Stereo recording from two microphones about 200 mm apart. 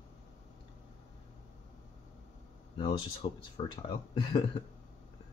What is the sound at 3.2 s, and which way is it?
Speech, 25° left (ahead or behind).